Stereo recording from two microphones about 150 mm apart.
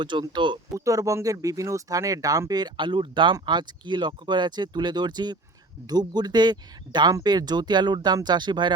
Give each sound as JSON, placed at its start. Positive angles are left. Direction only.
{"t": 0.0, "sound": "speech", "side_deg": -30}